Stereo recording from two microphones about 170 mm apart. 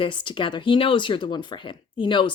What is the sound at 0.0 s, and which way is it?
Speech, 30° left (ahead or behind).